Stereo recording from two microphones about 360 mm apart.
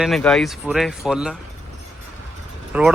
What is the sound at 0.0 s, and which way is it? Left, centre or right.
Speech, centre.